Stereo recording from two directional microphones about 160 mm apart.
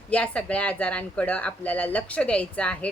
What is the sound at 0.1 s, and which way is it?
Speech, 5° left (ahead or behind).